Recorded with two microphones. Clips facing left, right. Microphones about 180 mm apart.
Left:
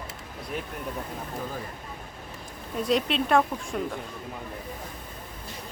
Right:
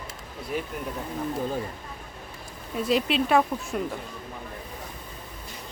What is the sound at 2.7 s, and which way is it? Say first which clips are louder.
Speech: right 1 dB; centre (ahead or behind).